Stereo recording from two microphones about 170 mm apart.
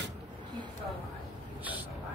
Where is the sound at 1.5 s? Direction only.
10° right (ahead or behind).